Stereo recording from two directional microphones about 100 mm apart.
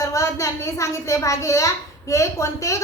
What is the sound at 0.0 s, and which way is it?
A woman's voice, 30° left (ahead or behind).